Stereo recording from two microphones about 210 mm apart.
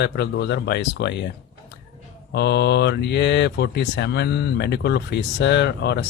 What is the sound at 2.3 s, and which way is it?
Speech, 55° left (ahead or behind).